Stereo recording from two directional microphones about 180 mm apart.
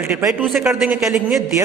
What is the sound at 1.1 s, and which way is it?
Speech, 5° right (ahead or behind).